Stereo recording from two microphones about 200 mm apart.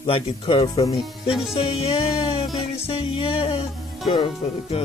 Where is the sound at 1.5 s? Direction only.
30° left (ahead or behind).